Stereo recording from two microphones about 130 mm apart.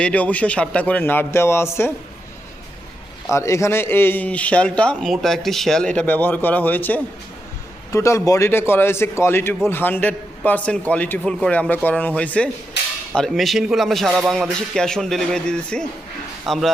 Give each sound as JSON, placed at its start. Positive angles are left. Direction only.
{"t": 0.0, "sound": "speech", "side_deg": 10}
{"t": 3.3, "sound": "a man's voice", "side_deg": 25}